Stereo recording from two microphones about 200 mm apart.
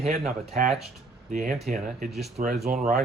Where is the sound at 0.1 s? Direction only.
35° right (ahead or behind).